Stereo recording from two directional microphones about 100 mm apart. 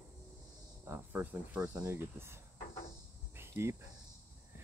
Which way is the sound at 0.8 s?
20° right (ahead or behind).